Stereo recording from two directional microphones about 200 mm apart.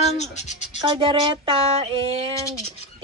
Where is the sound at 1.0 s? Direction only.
25° right (ahead or behind).